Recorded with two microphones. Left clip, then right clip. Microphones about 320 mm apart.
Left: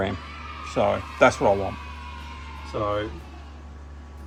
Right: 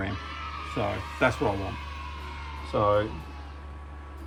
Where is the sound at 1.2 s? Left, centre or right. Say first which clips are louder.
Left 7 dB; centre.